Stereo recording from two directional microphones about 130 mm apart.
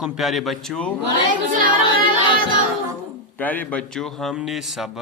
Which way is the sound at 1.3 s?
90° right.